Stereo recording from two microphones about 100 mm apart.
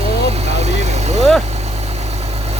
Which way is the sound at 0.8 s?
90° right.